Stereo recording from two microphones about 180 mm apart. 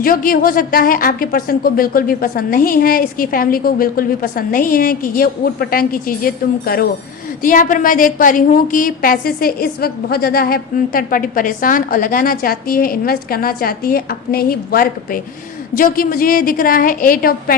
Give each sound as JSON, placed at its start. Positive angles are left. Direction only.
{"t": 0.0, "sound": "a woman's voice", "side_deg": 55}